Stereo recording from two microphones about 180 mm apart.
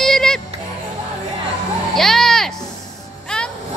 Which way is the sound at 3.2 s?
5° left (ahead or behind).